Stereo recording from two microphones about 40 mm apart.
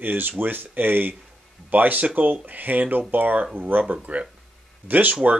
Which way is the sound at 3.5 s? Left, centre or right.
Right.